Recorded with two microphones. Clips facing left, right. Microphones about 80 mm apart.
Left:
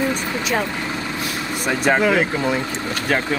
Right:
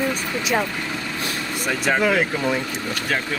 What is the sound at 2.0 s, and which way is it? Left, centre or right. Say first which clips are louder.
Speech: left 2 dB; centre.